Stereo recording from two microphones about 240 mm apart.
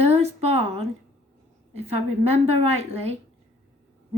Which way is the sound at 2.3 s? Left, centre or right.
Right.